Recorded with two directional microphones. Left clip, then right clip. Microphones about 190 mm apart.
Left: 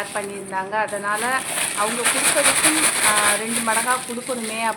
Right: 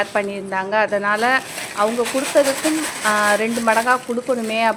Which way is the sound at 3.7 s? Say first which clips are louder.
Right 5 dB; 35° right (ahead or behind).